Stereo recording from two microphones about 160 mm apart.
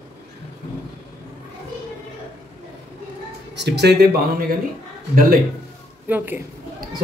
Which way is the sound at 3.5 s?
90° right.